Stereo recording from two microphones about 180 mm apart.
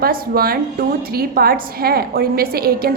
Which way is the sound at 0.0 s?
55° right (ahead or behind).